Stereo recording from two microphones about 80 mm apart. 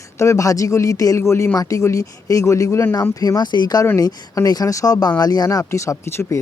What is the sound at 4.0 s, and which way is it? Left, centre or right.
Speech, left.